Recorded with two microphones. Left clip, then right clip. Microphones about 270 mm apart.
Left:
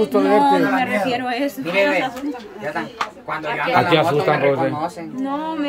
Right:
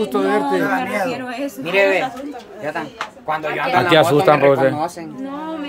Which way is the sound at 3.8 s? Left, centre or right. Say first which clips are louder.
Right 4 dB; centre.